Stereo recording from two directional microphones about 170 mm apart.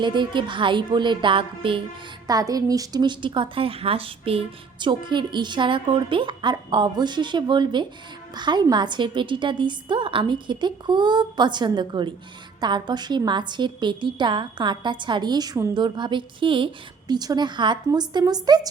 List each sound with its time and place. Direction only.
0.0 s a woman's voice: 25° right (ahead or behind)